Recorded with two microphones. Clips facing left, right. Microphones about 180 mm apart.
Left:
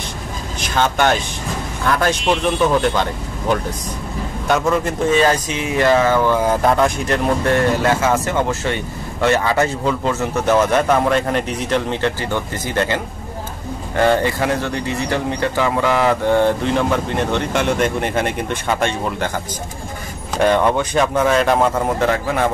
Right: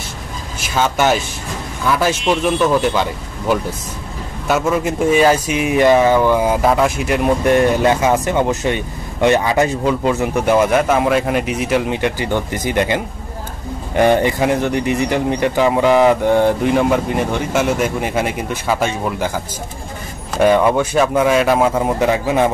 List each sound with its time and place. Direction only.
0.6 s speech: 5° right (ahead or behind)
7.4 s speech: 20° right (ahead or behind)